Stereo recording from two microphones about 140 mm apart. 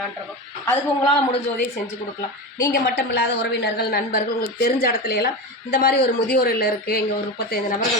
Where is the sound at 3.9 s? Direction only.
90° left.